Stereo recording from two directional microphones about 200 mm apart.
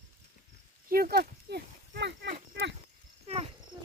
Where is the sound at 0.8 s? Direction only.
45° right (ahead or behind).